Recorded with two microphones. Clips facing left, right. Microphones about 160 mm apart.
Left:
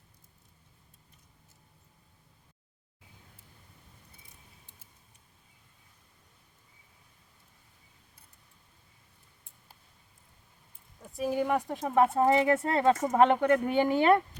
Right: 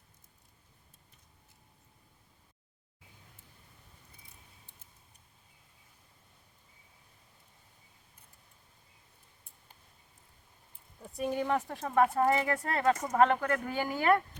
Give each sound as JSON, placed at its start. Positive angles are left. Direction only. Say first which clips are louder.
{"t": 11.0, "sound": "speech", "louder": "left 3 dB", "side_deg": 0}